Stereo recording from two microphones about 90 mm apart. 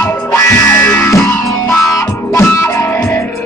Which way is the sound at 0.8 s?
20° left (ahead or behind).